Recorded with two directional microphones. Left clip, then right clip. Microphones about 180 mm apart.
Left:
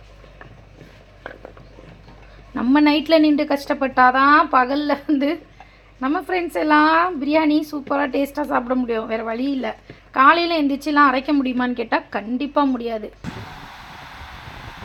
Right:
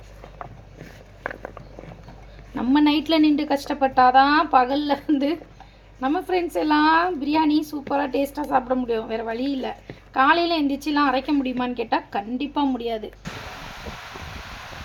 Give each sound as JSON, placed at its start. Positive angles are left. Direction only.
{"t": 2.6, "sound": "a woman's voice", "side_deg": 25}